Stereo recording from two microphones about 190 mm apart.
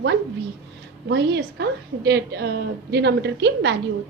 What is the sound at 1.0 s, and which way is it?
A woman's voice, 65° right (ahead or behind).